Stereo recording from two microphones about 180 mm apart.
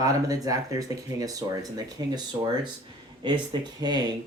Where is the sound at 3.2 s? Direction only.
25° right (ahead or behind).